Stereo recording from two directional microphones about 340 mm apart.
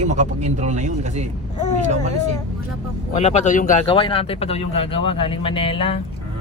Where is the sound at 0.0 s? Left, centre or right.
Right.